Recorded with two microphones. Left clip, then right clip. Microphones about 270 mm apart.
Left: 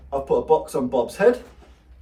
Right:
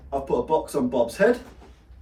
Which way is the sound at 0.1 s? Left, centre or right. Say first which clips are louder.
Left 4 dB; centre.